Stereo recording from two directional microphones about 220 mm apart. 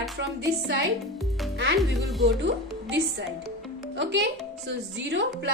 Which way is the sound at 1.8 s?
Centre (ahead or behind).